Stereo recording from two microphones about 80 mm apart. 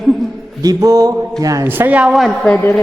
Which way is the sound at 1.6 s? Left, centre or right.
Right.